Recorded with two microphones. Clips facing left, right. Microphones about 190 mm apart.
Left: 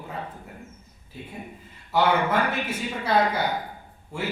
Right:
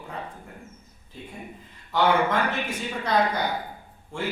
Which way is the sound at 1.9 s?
10° left (ahead or behind).